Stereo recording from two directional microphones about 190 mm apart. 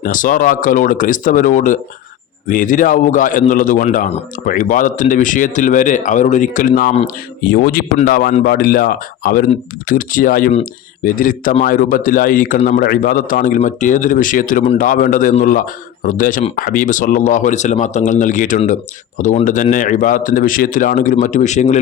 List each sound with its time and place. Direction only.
0.0 s a man's voice: 45° left (ahead or behind)